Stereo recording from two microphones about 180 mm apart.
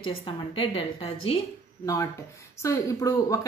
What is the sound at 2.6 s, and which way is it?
Speech, 15° left (ahead or behind).